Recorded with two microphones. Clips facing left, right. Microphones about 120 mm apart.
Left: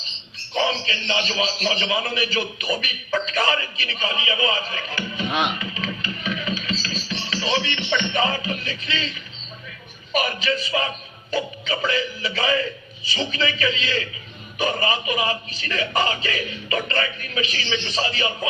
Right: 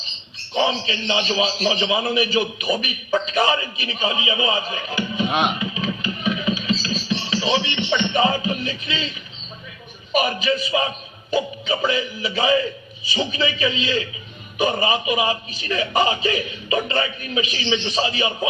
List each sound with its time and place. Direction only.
0.5 s a man's voice: 20° right (ahead or behind)